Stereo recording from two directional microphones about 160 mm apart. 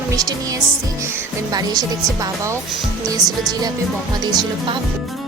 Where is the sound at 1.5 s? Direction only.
25° right (ahead or behind).